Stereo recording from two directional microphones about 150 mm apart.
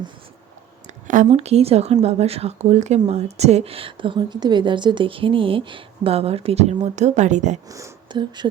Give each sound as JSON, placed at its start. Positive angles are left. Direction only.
{"t": 1.0, "sound": "a woman's voice", "side_deg": -55}
{"t": 7.7, "sound": "speech", "side_deg": -25}